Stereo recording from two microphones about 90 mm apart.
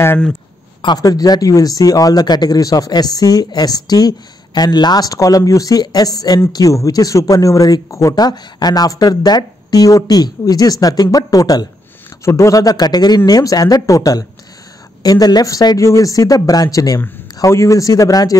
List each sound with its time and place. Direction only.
0.8 s speech: 45° left (ahead or behind)